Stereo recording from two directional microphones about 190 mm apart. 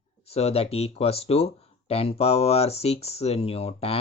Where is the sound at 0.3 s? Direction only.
35° left (ahead or behind).